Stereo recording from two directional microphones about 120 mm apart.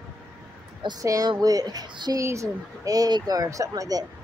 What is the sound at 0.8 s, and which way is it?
Speech, 30° right (ahead or behind).